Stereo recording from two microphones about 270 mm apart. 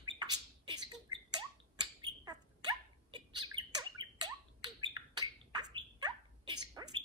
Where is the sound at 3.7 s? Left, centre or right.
Centre.